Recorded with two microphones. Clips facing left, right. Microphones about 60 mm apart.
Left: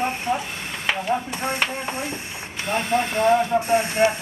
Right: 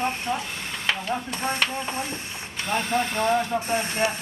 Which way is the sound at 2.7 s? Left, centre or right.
Left.